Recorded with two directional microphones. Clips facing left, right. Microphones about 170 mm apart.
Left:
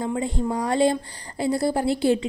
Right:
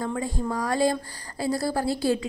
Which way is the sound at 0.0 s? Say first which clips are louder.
Left 3 dB; 20° left (ahead or behind).